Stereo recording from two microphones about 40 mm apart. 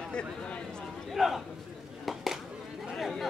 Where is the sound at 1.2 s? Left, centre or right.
Centre.